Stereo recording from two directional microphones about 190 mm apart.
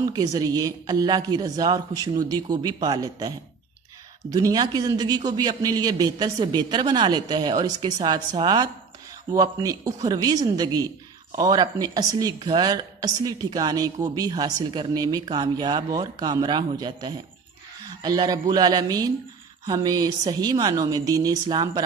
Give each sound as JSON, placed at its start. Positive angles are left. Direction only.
{"t": 0.1, "sound": "a man's voice", "side_deg": -20}